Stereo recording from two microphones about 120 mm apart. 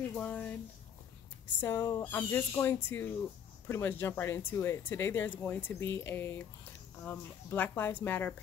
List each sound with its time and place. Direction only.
0.1 s speech: 10° left (ahead or behind)
1.6 s speech: 20° left (ahead or behind)